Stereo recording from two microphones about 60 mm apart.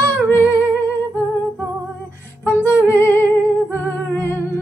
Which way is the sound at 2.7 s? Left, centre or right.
Left.